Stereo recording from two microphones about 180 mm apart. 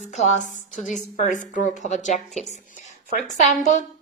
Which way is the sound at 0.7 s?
5° left (ahead or behind).